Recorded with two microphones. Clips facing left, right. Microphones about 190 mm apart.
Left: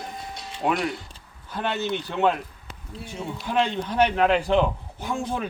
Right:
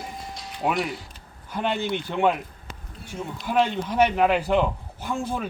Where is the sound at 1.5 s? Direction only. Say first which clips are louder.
Right 1 dB; 15° right (ahead or behind).